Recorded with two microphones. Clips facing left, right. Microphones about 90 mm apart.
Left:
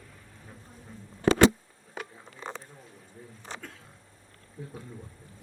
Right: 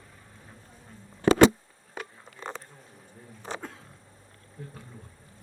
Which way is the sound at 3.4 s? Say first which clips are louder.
Right 6 dB; 45° right (ahead or behind).